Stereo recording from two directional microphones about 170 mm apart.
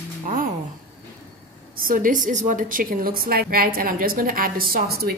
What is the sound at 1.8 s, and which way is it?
A woman's voice, 55° right (ahead or behind).